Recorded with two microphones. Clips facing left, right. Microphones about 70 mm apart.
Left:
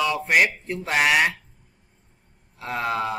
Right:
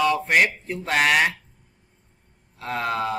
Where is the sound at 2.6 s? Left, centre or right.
Centre.